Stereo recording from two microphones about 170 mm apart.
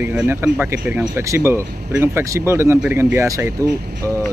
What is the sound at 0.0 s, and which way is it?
Speech, 10° right (ahead or behind).